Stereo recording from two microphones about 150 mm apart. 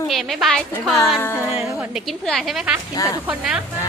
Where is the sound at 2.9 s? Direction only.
20° left (ahead or behind).